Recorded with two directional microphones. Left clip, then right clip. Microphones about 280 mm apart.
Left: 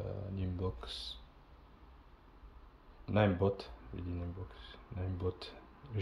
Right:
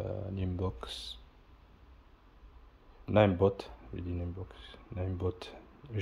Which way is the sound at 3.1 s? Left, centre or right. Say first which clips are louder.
Right 6 dB; centre.